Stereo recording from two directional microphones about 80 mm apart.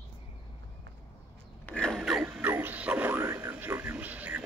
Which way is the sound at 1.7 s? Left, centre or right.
Centre.